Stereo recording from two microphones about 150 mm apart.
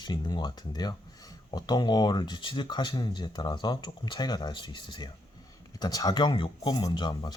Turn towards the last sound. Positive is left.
turn(degrees=30)  # may be behind; listen again after turning